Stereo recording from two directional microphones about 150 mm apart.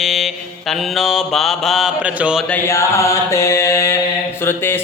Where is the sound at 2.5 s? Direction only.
20° left (ahead or behind).